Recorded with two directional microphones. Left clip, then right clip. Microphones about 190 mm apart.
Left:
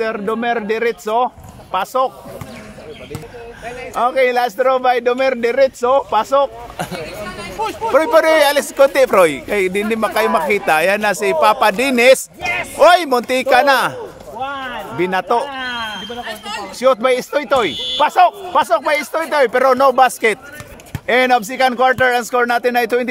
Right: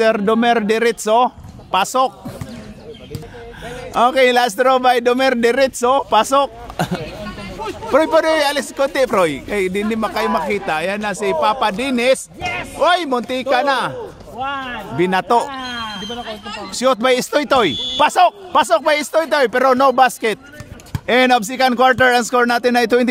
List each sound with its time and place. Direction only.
0.0 s a man's voice: 55° right (ahead or behind)
3.6 s a man's voice: 40° right (ahead or behind)
8.1 s speech: 10° right (ahead or behind); by 10.4 s 5° left (ahead or behind)
10.5 s speech: 20° left (ahead or behind)
14.4 s a sound: 50° right (ahead or behind)
15.0 s speech: 25° right (ahead or behind)
16.3 s speech: 60° left (ahead or behind)
16.7 s speech: 40° right (ahead or behind)